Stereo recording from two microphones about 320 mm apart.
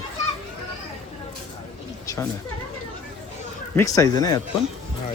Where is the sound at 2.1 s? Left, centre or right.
Centre.